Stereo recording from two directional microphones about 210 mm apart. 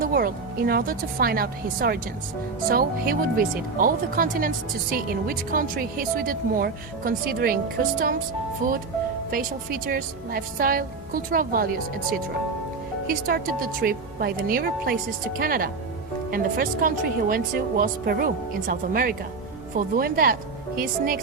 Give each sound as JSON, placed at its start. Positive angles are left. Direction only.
{"t": 0.0, "sound": "speech", "side_deg": -45}
{"t": 13.1, "sound": "speech", "side_deg": -45}